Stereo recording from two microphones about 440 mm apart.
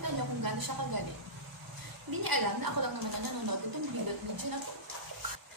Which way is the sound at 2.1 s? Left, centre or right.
Right.